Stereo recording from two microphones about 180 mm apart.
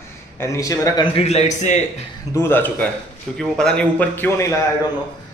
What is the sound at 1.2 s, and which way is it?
Speech, 35° left (ahead or behind).